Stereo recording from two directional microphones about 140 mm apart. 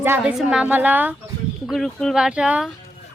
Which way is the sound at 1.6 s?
5° left (ahead or behind).